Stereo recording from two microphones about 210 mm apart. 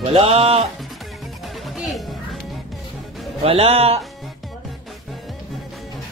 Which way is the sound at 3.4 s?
30° right (ahead or behind).